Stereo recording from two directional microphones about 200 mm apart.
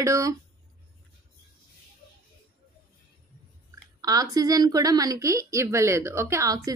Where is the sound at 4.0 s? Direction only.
20° right (ahead or behind).